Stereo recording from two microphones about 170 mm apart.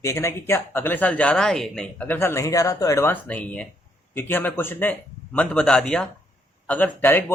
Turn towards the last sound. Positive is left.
turn(degrees=10)  # may be behind; listen again after turning